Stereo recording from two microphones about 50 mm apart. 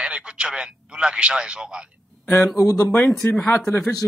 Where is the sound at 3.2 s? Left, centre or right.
Left.